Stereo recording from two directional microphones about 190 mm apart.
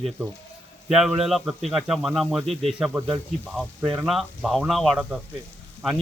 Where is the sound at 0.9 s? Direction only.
Centre (ahead or behind).